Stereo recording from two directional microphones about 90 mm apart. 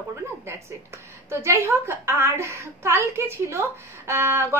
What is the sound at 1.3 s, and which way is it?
A woman's voice, 30° right (ahead or behind).